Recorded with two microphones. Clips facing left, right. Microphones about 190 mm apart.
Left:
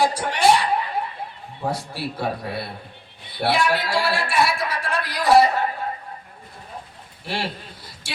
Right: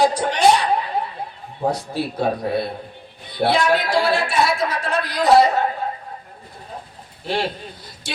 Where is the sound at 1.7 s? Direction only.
20° right (ahead or behind).